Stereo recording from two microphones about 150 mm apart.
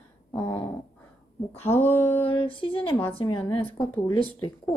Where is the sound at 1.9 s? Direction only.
15° left (ahead or behind).